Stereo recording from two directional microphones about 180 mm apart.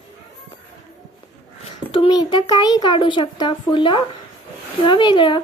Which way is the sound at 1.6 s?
30° left (ahead or behind).